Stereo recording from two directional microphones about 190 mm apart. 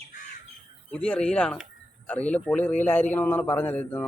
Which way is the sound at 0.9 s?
5° left (ahead or behind).